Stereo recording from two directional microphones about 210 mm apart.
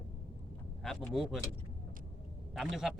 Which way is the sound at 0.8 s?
Centre (ahead or behind).